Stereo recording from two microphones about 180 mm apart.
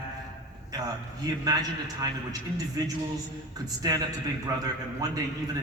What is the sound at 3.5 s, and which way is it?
Speech, 20° right (ahead or behind).